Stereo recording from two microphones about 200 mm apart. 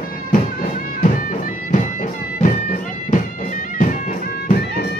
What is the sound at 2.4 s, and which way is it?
Bagpipes, 40° left (ahead or behind).